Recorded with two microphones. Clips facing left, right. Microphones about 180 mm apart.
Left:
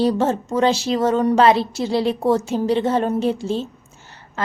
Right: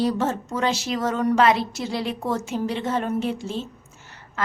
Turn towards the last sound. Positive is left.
turn(degrees=30)  # may be behind; listen again after turning